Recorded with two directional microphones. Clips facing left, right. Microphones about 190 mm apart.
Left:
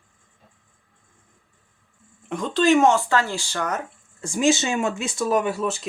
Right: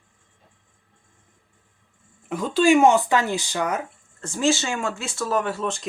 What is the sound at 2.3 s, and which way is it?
Speech, 5° right (ahead or behind).